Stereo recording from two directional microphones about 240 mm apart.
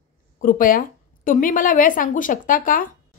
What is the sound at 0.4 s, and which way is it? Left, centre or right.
Speech, left.